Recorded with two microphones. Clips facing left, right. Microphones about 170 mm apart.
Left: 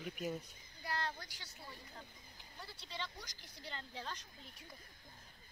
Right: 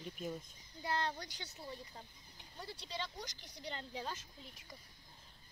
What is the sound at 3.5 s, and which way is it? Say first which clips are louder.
Speech: right 3 dB; 15° right (ahead or behind).